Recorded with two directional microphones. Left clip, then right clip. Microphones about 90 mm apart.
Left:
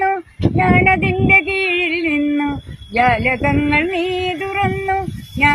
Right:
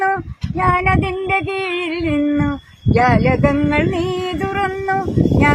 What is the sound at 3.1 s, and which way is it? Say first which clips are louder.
Speech: right 1 dB; 10° right (ahead or behind).